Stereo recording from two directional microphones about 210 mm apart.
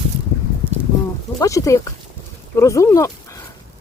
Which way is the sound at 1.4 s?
15° left (ahead or behind).